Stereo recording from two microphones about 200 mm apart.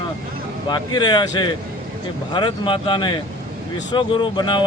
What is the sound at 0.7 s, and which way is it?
Speech, 20° left (ahead or behind).